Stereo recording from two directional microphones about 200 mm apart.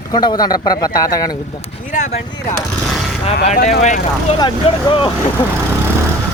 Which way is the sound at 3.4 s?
40° left (ahead or behind).